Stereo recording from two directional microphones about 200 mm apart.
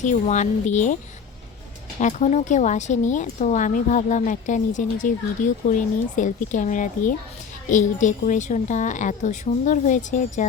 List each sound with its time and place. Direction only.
0.0 s a woman's voice: 35° left (ahead or behind)
2.0 s a woman's voice: 35° left (ahead or behind)